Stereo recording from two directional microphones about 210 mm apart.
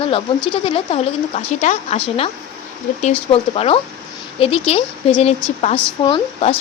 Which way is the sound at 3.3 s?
25° left (ahead or behind).